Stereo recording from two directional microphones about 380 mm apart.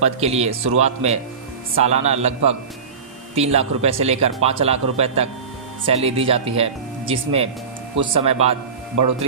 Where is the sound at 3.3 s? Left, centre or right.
Centre.